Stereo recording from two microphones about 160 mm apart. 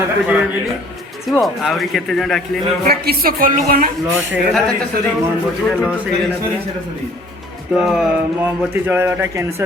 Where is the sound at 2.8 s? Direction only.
70° right (ahead or behind).